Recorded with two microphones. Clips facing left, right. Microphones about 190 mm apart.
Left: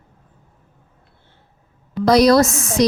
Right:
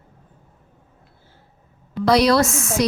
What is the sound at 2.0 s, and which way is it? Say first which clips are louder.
Speech: left 4 dB; 40° left (ahead or behind).